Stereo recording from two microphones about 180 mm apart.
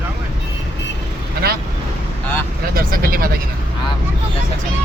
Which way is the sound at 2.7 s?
55° right (ahead or behind).